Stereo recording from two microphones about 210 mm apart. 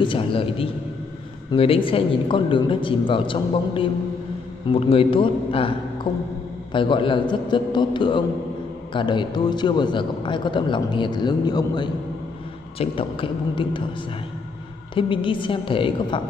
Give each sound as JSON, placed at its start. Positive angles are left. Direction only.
{"t": 0.0, "sound": "a man's voice", "side_deg": 25}
{"t": 15.0, "sound": "a man's voice", "side_deg": 25}